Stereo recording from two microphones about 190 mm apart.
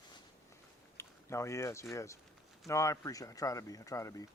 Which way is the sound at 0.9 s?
15° left (ahead or behind).